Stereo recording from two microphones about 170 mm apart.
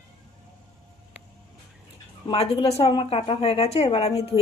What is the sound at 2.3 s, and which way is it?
Speech, 35° left (ahead or behind).